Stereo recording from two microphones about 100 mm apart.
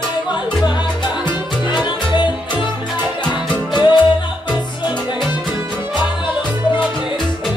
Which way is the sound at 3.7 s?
50° left (ahead or behind).